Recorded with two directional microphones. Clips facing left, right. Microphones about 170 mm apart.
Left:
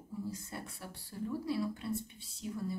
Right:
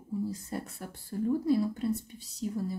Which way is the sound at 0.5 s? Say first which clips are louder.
Right 7 dB; 45° right (ahead or behind).